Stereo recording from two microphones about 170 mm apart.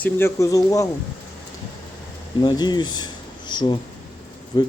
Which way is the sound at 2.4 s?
25° left (ahead or behind).